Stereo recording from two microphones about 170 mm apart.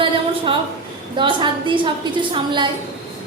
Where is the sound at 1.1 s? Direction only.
30° right (ahead or behind).